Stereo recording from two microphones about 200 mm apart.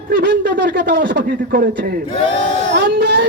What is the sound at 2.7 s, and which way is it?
Speech, 55° right (ahead or behind).